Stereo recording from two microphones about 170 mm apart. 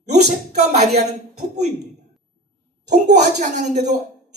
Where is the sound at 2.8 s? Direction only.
45° right (ahead or behind).